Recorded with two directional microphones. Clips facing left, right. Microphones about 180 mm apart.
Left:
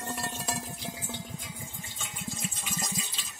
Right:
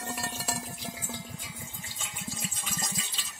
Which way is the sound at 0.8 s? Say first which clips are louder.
Left 1 dB; 25° left (ahead or behind).